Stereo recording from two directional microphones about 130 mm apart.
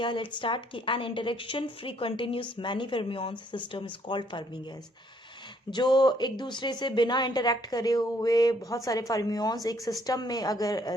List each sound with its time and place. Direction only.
0.0 s a woman's voice: 40° left (ahead or behind)
5.7 s a woman's voice: 35° left (ahead or behind)